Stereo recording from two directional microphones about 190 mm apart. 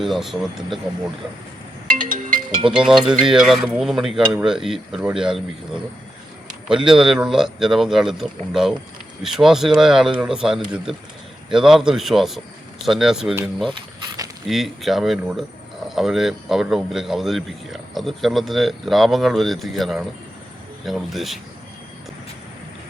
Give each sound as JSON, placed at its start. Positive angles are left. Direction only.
{"t": 0.0, "sound": "speech", "side_deg": 0}
{"t": 1.9, "sound": "music", "side_deg": -45}
{"t": 2.6, "sound": "speech", "side_deg": -5}
{"t": 13.7, "sound": "a sound", "side_deg": -25}
{"t": 14.4, "sound": "speech", "side_deg": 0}